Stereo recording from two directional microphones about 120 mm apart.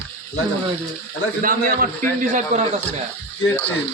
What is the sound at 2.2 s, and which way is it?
Speech, 80° right.